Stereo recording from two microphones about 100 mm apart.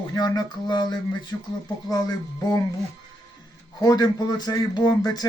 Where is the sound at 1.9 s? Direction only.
40° left (ahead or behind).